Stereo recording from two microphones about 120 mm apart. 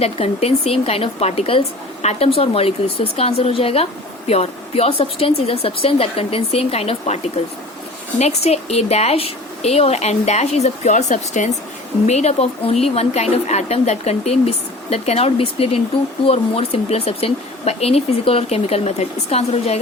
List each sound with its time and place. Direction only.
0.0 s speech: 60° left (ahead or behind)
8.2 s speech: 65° left (ahead or behind); by 11.5 s 85° left
12.0 s speech: 70° left (ahead or behind)